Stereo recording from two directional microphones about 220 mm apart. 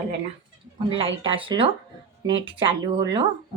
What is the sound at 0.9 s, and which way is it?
Speech, 25° right (ahead or behind).